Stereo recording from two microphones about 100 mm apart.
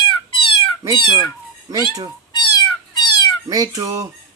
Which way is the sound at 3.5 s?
35° right (ahead or behind).